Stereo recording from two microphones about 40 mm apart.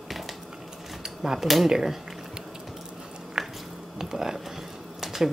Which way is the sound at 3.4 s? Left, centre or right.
Centre.